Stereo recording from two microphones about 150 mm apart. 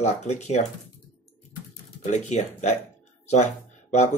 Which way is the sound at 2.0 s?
50° left (ahead or behind).